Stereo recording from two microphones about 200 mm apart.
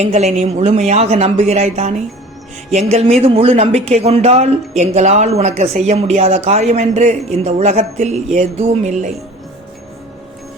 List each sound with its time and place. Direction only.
0.0 s a man's voice: 35° right (ahead or behind)